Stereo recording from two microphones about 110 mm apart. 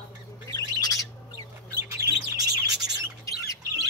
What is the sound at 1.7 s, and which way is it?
Bird, 30° right (ahead or behind).